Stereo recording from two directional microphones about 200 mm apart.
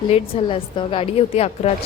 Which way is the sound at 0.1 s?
25° left (ahead or behind).